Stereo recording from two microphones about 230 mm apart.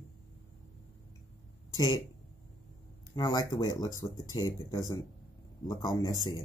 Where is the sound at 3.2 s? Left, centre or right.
Centre.